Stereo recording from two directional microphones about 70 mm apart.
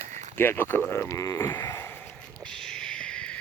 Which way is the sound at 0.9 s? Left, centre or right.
Left.